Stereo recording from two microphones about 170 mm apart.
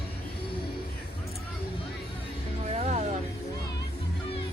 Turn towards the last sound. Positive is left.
turn(degrees=-45)  # may be behind; listen again after turning